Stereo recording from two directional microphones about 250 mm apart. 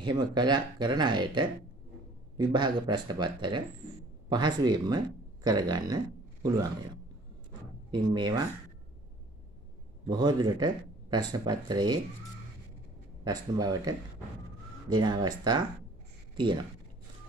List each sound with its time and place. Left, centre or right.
0.0 s speech: centre
7.9 s speech: centre
10.0 s speech: centre
13.2 s speech: centre